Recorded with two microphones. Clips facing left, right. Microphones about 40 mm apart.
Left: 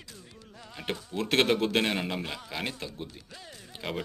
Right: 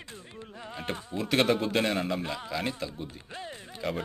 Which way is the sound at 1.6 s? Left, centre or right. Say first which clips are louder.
Even; left.